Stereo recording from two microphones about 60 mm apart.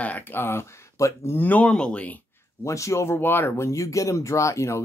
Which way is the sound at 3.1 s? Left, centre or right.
Left.